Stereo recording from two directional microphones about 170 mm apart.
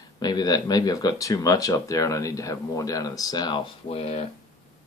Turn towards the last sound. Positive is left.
turn(degrees=40)  # may be behind; listen again after turning